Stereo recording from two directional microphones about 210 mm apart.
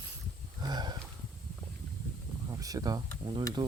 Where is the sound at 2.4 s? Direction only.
15° right (ahead or behind).